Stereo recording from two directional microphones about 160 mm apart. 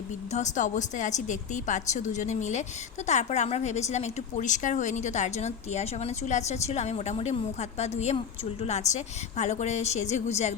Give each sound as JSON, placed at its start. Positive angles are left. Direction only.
{"t": 0.3, "sound": "a woman's voice", "side_deg": 45}